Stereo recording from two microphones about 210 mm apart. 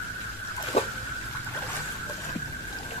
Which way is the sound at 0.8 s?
30° left (ahead or behind).